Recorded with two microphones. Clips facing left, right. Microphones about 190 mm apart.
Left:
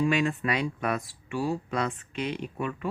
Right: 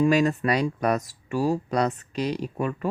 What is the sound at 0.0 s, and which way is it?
Speech, 40° right (ahead or behind).